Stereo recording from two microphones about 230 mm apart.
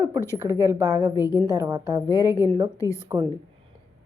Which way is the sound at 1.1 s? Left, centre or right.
Centre.